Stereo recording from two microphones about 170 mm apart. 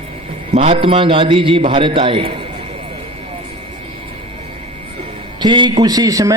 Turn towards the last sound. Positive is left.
turn(degrees=-20)  # may be behind; listen again after turning